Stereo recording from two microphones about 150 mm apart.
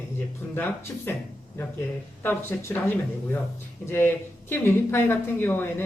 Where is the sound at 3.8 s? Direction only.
15° left (ahead or behind).